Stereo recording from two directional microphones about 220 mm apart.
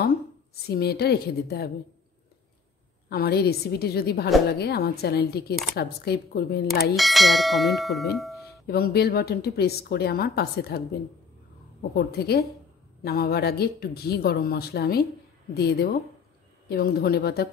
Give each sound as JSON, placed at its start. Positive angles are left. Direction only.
{"t": 0.6, "sound": "a woman's voice", "side_deg": 45}
{"t": 3.1, "sound": "a woman's voice", "side_deg": 45}
{"t": 7.0, "sound": "speech", "side_deg": 0}
{"t": 8.6, "sound": "a woman's voice", "side_deg": 45}
{"t": 11.9, "sound": "a woman's voice", "side_deg": 45}